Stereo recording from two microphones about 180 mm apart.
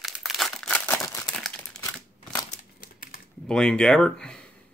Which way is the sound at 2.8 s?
55° left (ahead or behind).